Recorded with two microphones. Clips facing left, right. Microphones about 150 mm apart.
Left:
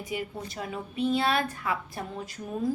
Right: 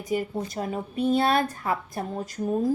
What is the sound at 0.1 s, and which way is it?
A woman's voice, 45° right (ahead or behind).